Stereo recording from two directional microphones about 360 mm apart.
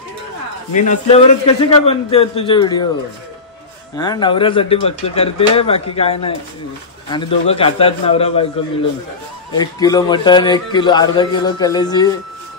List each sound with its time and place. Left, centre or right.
0.7 s a man's voice: centre
3.9 s a man's voice: centre
9.5 s a man's voice: centre